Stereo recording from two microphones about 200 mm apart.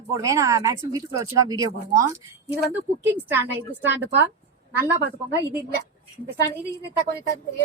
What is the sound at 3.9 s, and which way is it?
Speech, 60° right (ahead or behind).